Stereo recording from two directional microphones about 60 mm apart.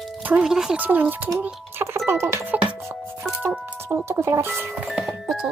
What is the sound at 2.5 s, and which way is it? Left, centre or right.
Music, right.